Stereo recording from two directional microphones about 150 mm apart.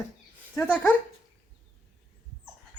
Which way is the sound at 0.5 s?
15° left (ahead or behind).